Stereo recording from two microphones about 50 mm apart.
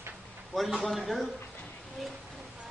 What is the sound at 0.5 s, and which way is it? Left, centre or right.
Speech, centre.